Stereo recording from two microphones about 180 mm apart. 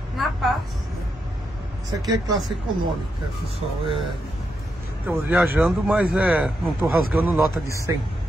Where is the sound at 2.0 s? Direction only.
20° right (ahead or behind).